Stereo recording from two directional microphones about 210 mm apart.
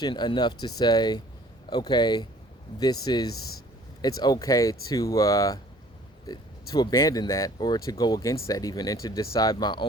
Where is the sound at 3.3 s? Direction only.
90° left.